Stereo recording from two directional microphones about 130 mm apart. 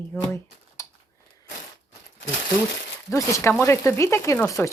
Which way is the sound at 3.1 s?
25° left (ahead or behind).